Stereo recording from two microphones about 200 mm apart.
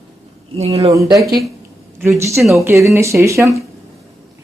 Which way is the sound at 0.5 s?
30° right (ahead or behind).